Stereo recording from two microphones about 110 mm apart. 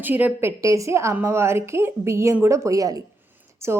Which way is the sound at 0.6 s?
30° right (ahead or behind).